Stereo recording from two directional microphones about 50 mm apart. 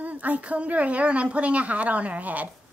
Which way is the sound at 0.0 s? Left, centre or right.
Right.